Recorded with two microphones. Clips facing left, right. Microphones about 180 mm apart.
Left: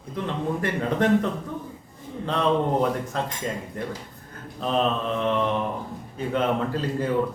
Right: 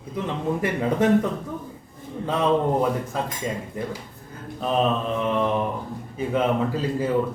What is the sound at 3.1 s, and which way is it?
Speech, 5° right (ahead or behind).